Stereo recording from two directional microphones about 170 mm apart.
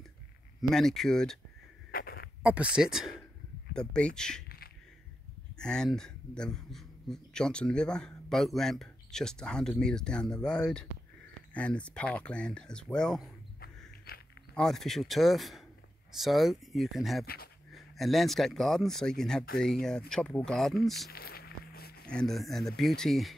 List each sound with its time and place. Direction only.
0.6 s speech: centre (ahead or behind)
1.9 s goat: 60° left (ahead or behind)
2.4 s speech: 5° right (ahead or behind)
5.6 s speech: 5° left (ahead or behind)
13.6 s a sound: 65° left (ahead or behind)
14.5 s speech: 5° left (ahead or behind)
21.1 s music: 65° left (ahead or behind)
22.0 s speech: 5° left (ahead or behind)